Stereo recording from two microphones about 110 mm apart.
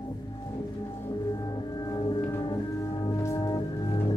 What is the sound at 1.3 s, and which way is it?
Music, 40° left (ahead or behind).